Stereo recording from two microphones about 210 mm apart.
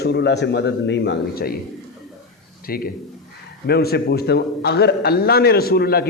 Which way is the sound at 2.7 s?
45° left (ahead or behind).